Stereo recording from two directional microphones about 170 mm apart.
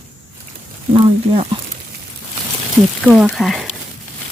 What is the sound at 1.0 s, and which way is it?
Speech, 35° right (ahead or behind).